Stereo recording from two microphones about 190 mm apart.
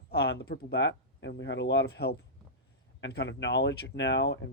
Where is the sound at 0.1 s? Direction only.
60° left (ahead or behind).